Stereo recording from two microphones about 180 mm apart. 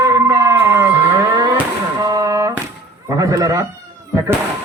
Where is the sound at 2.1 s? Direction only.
20° right (ahead or behind).